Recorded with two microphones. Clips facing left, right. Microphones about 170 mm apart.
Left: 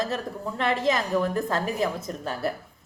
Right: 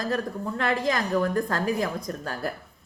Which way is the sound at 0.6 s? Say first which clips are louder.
Left 2 dB; centre (ahead or behind).